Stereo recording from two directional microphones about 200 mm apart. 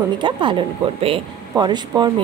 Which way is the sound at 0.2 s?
25° right (ahead or behind).